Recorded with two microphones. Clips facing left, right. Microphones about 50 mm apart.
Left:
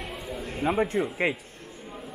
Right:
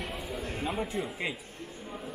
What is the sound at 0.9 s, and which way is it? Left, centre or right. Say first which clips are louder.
Speech: left 7 dB; centre.